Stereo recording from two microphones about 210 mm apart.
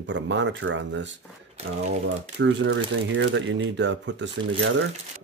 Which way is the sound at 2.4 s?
55° right (ahead or behind).